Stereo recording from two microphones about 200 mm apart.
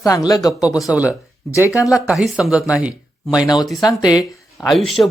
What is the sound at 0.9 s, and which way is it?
Speech, 5° right (ahead or behind).